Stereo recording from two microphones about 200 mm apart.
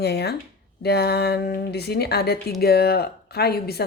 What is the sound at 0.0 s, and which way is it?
A woman's voice, 55° left (ahead or behind).